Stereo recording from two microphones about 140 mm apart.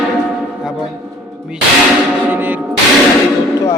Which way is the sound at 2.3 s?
15° right (ahead or behind).